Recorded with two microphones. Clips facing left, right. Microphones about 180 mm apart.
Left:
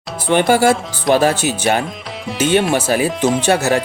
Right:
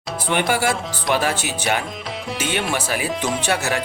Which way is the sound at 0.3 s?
30° left (ahead or behind).